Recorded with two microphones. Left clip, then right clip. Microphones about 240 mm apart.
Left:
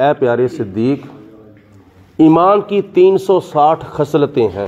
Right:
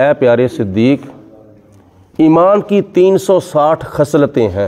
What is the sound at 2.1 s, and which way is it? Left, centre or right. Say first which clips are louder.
A man's voice: right 1 dB; right.